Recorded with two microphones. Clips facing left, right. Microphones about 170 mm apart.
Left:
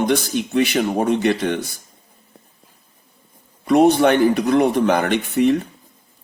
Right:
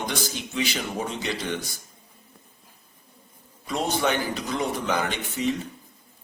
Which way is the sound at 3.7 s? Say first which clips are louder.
Left 12 dB; 60° left (ahead or behind).